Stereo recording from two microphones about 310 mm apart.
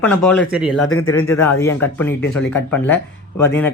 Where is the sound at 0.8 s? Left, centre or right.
Left.